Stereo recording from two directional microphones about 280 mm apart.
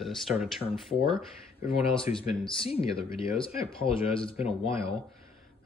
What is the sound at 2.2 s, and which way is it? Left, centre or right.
Speech, centre.